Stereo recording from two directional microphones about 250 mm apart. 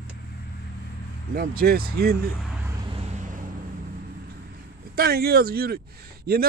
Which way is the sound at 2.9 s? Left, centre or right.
Right.